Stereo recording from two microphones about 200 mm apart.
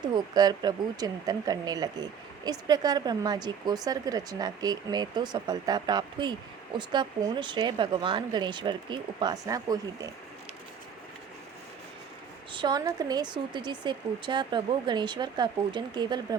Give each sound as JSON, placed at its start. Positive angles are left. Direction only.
{"t": 0.0, "sound": "speech", "side_deg": -20}
{"t": 12.5, "sound": "speech", "side_deg": -20}